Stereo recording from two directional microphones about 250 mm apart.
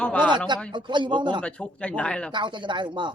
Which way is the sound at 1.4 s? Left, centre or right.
Centre.